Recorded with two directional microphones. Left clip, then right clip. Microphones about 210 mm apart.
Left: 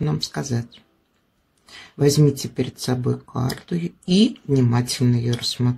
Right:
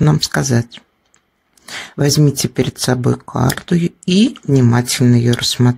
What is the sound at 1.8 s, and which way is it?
Speech, 40° right (ahead or behind).